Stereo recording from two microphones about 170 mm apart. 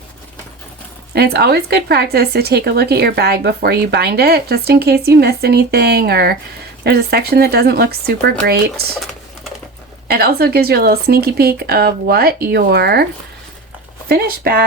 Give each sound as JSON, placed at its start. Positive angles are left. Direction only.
{"t": 1.1, "sound": "speech", "side_deg": -70}
{"t": 10.1, "sound": "speech", "side_deg": -65}
{"t": 14.1, "sound": "speech", "side_deg": -60}